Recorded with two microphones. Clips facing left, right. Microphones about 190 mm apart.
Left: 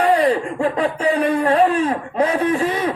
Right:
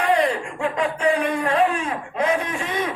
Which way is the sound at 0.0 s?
30° left (ahead or behind).